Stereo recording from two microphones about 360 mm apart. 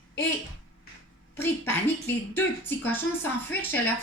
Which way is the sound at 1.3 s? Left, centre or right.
Centre.